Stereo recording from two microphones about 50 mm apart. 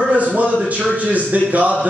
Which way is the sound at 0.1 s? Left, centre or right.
Right.